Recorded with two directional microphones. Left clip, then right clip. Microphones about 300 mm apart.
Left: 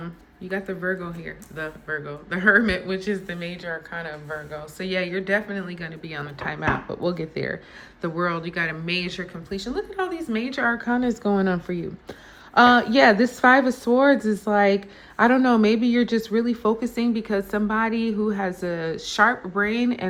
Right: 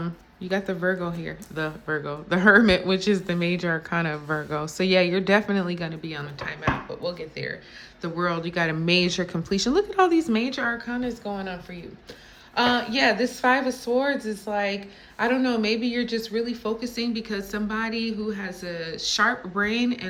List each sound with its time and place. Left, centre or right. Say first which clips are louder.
0.0 s speech: right 3 dB; centre
4.8 s speech: right 5 dB; centre
8.0 s speech: left 1 dB; centre